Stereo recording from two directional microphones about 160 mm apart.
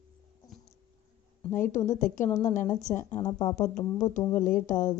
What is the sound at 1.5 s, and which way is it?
Speech, 55° left (ahead or behind).